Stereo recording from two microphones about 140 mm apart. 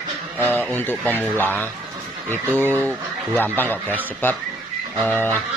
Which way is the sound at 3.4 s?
15° left (ahead or behind).